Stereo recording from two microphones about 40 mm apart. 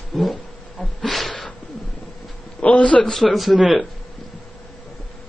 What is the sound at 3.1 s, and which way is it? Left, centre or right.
Speech, centre.